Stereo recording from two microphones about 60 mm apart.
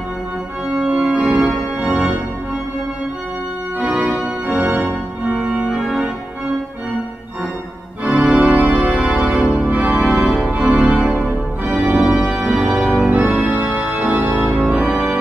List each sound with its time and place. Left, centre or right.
0.7 s organ: centre
3.8 s organ: right
8.0 s organ: right
11.1 s organ: centre
11.7 s organ: centre
13.1 s organ: right